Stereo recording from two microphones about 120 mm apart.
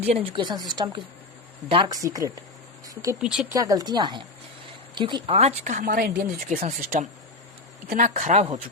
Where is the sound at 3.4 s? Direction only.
30° right (ahead or behind).